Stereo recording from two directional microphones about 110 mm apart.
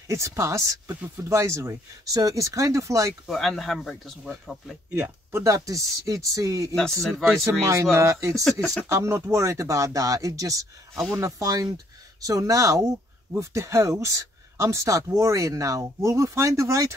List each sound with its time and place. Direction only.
0.1 s speech: 25° right (ahead or behind)
3.3 s speech: centre (ahead or behind)
4.9 s speech: 25° right (ahead or behind)
6.7 s speech: 5° left (ahead or behind)
7.9 s speech: 25° right (ahead or behind)
8.5 s speech: 5° left (ahead or behind)
8.9 s speech: 25° right (ahead or behind)